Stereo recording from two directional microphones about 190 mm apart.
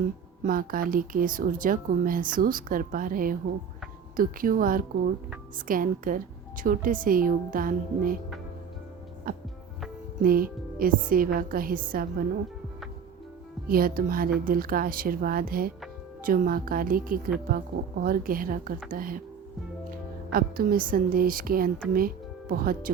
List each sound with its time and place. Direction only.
0.4 s speech: 50° right (ahead or behind)
9.3 s music: 50° right (ahead or behind)
10.2 s speech: 50° right (ahead or behind)
13.7 s speech: 50° right (ahead or behind)
20.3 s speech: 50° right (ahead or behind)